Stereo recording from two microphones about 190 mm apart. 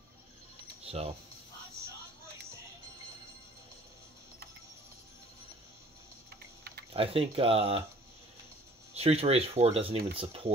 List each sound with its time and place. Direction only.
0.8 s speech: 30° right (ahead or behind)
6.9 s speech: 30° right (ahead or behind)
8.9 s speech: 30° right (ahead or behind)